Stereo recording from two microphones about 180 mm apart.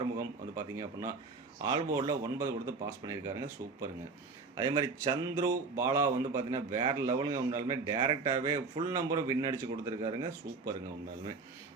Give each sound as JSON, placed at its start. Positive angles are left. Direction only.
{"t": 0.2, "sound": "speech", "side_deg": -20}